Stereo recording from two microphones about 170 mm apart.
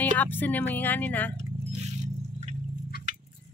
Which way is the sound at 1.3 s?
40° right (ahead or behind).